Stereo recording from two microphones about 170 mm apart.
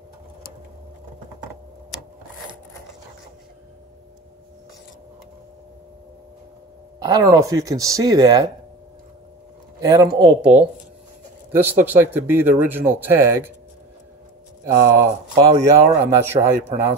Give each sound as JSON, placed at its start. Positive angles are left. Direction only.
{"t": 7.0, "sound": "speech", "side_deg": -20}
{"t": 9.8, "sound": "speech", "side_deg": -20}
{"t": 11.5, "sound": "speech", "side_deg": -10}
{"t": 14.6, "sound": "speech", "side_deg": -15}